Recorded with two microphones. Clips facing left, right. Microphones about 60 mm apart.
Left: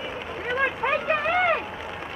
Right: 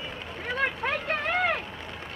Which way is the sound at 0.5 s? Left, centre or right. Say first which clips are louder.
Left 4 dB; centre.